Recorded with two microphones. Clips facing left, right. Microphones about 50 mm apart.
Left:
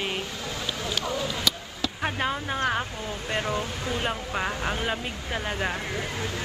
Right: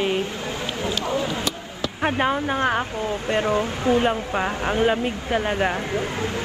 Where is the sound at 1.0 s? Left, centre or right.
Right.